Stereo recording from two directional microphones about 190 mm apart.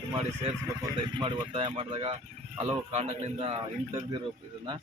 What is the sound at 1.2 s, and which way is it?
Speech, 25° right (ahead or behind).